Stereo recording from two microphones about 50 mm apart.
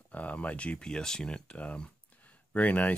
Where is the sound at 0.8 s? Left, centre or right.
Centre.